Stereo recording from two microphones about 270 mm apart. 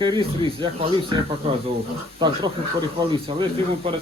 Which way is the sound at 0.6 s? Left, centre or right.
Centre.